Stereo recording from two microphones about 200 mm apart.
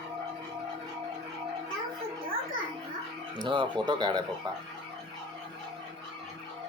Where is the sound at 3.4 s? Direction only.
25° right (ahead or behind).